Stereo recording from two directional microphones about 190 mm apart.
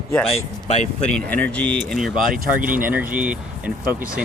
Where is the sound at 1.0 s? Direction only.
5° left (ahead or behind).